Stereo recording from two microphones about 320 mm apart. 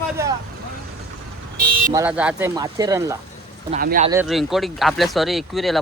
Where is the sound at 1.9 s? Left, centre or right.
Centre.